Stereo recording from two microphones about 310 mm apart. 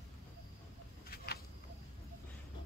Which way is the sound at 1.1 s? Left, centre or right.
Left.